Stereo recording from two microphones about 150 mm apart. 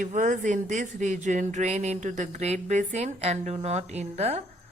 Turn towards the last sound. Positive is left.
turn(degrees=-45)  # may be behind; listen again after turning